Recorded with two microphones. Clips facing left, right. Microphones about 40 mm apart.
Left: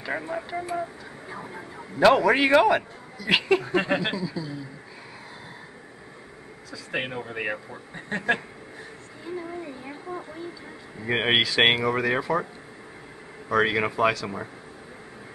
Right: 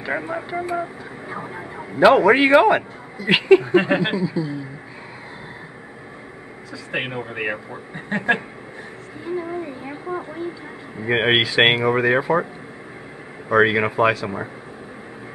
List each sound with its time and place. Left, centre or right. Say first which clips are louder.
0.0 s a man's voice: right 5 dB; centre
6.9 s a man's voice: right 4 dB; right
9.2 s a sound: right 7 dB; right
11.0 s speech: right 5 dB; centre
13.5 s speech: right 6 dB; centre